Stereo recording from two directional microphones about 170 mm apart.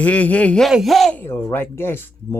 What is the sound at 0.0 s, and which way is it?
Speech, 10° left (ahead or behind).